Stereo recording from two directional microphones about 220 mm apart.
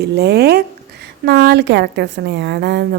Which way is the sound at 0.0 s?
50° right (ahead or behind).